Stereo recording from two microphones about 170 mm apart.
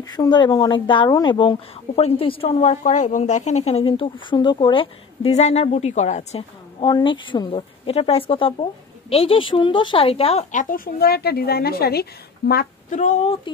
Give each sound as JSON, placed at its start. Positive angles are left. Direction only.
{"t": 0.0, "sound": "a woman's voice", "side_deg": 25}
{"t": 6.8, "sound": "a woman's voice", "side_deg": 25}
{"t": 12.9, "sound": "a woman's voice", "side_deg": 45}